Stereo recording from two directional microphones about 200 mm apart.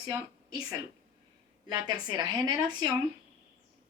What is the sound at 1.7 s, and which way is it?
A woman's voice, 20° right (ahead or behind).